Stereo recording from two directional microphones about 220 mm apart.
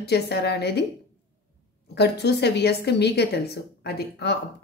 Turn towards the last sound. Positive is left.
turn(degrees=50)  # may be behind; listen again after turning